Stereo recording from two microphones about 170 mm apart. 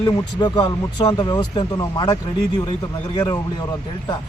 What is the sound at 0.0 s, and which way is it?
Speech, 20° left (ahead or behind).